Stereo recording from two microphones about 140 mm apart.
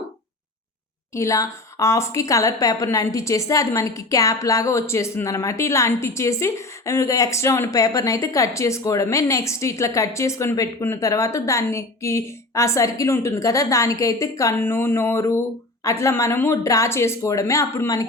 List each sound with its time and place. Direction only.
1.1 s a woman's voice: 20° left (ahead or behind)